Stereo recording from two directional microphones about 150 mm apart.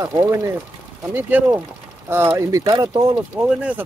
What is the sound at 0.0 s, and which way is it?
Speech, 25° right (ahead or behind).